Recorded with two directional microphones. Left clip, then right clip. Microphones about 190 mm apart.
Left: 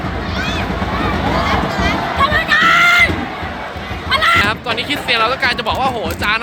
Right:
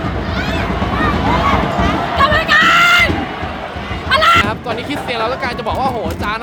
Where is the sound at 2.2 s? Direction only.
20° right (ahead or behind).